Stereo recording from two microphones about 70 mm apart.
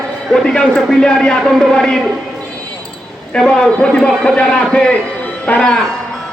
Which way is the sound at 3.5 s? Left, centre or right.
Centre.